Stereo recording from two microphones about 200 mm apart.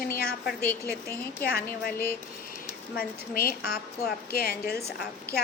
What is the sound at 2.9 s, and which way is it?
A woman's voice, 45° left (ahead or behind).